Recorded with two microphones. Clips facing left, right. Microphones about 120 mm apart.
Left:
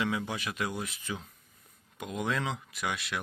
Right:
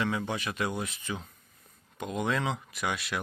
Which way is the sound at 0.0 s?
5° left (ahead or behind).